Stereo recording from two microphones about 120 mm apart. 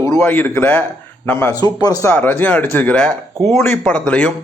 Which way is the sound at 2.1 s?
15° left (ahead or behind).